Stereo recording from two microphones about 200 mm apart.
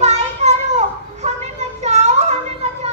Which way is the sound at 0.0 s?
35° right (ahead or behind).